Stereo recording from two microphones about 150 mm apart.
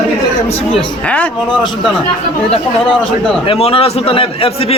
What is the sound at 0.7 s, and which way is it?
Speech, 10° left (ahead or behind).